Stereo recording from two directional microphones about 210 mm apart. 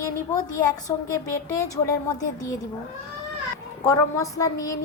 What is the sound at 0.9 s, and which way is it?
Child singing, 15° left (ahead or behind).